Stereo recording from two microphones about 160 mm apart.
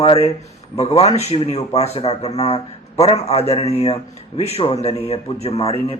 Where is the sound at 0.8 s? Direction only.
40° left (ahead or behind).